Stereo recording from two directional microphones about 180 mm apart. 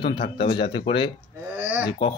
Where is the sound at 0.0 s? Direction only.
30° left (ahead or behind).